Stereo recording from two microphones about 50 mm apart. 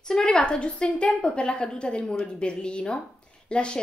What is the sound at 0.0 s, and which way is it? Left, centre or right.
A woman's voice, centre.